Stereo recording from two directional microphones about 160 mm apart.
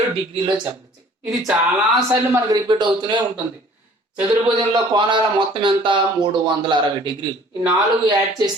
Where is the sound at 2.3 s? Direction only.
25° right (ahead or behind).